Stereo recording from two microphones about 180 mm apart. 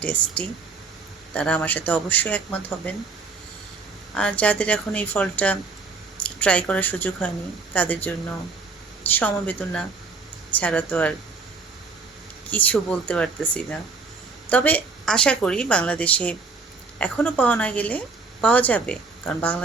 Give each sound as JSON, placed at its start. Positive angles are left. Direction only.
{"t": 0.0, "sound": "a woman's voice", "side_deg": 5}
{"t": 4.1, "sound": "a woman's voice", "side_deg": 5}
{"t": 12.5, "sound": "a woman's voice", "side_deg": 10}